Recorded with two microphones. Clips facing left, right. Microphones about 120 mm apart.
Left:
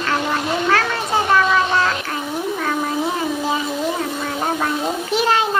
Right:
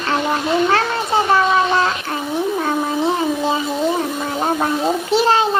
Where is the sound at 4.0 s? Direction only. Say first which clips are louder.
Right 2 dB; 25° right (ahead or behind).